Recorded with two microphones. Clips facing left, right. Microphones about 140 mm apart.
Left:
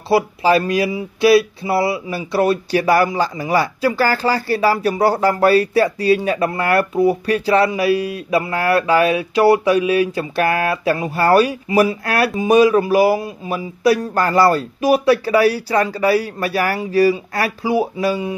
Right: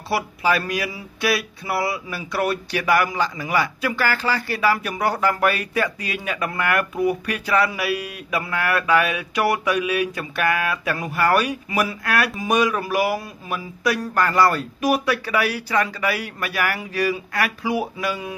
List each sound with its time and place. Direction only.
0.1 s speech: 25° left (ahead or behind)